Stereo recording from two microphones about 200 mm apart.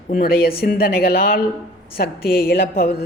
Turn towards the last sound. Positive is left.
turn(degrees=55)  # may be behind; listen again after turning